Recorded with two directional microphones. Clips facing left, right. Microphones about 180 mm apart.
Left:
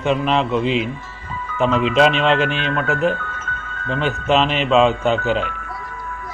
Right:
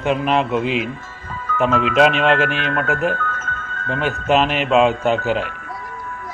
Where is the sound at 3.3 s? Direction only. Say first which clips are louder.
Right 2 dB; 45° right (ahead or behind).